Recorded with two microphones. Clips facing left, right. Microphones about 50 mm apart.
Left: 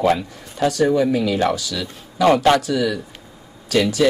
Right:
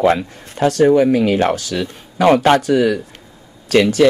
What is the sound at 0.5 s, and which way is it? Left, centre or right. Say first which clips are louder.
Speech: right 5 dB; right.